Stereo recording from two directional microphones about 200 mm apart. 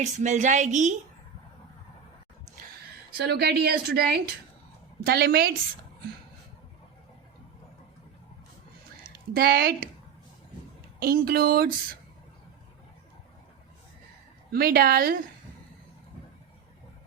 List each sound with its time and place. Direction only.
0.0 s a woman's voice: 35° right (ahead or behind)
3.2 s speech: 55° right (ahead or behind)
5.0 s speech: 50° right (ahead or behind)
9.0 s a woman's voice: 50° right (ahead or behind)
11.0 s speech: 50° right (ahead or behind)
14.5 s speech: 50° right (ahead or behind)